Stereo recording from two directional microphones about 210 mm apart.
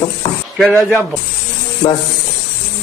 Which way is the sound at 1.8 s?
15° left (ahead or behind).